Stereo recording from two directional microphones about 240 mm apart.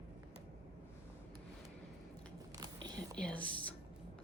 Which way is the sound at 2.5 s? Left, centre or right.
Centre.